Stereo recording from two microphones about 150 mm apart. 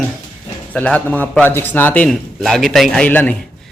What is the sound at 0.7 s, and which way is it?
A man's voice, 10° left (ahead or behind).